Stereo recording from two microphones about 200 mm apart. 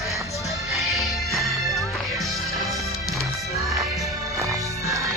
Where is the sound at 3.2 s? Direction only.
15° right (ahead or behind).